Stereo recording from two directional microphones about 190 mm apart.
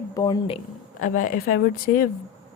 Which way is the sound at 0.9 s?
45° left (ahead or behind).